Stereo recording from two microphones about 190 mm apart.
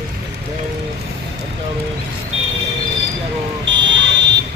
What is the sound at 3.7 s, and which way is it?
Buzzer, 75° right (ahead or behind).